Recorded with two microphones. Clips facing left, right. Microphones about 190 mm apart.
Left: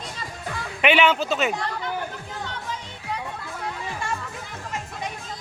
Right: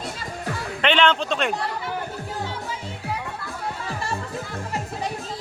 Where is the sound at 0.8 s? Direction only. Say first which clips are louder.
Left 1 dB; 10° left (ahead or behind).